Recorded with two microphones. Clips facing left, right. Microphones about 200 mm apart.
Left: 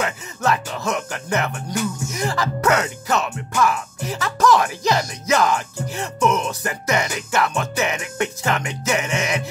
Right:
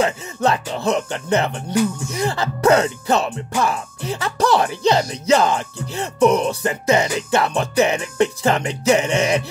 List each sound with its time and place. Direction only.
0.0 s speech: 25° right (ahead or behind)